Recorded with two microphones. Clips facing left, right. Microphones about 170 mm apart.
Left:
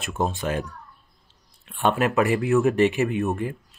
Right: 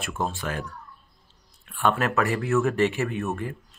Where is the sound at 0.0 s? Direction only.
20° left (ahead or behind).